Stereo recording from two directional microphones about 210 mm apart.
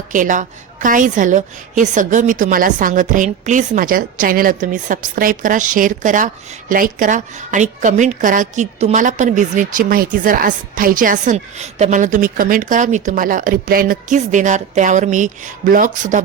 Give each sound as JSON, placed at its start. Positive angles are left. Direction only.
{"t": 0.1, "sound": "a woman's voice", "side_deg": -40}